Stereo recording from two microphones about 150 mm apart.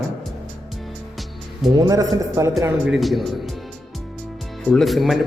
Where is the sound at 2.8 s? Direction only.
Centre (ahead or behind).